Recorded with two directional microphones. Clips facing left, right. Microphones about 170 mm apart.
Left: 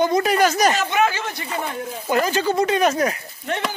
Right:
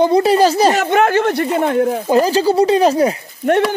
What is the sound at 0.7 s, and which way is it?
Speech, 60° right (ahead or behind).